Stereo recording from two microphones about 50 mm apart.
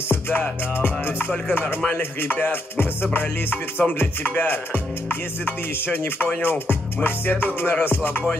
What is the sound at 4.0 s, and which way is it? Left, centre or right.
Music, left.